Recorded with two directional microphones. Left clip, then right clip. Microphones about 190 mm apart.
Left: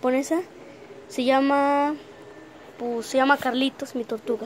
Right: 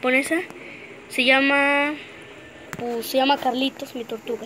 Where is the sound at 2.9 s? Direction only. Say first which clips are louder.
Even; 10° left (ahead or behind).